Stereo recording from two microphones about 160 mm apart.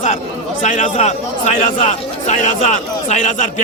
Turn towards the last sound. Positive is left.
turn(degrees=50)  # may be behind; listen again after turning